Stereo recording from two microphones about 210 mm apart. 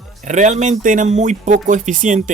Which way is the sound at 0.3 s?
35° right (ahead or behind).